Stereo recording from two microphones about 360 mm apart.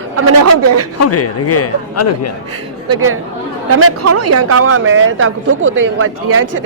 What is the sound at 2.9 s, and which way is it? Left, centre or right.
Speech, right.